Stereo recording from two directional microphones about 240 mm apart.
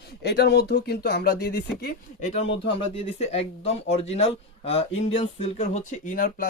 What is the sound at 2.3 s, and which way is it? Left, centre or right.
Speech, left.